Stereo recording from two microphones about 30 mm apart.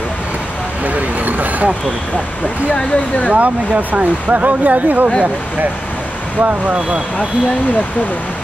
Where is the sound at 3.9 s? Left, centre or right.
Right.